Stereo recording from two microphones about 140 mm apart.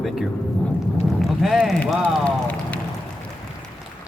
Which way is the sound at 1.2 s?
Centre (ahead or behind).